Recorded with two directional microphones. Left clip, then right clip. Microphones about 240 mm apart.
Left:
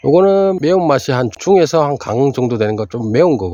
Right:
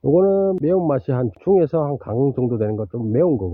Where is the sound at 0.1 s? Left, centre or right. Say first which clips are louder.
Left 6 dB; centre.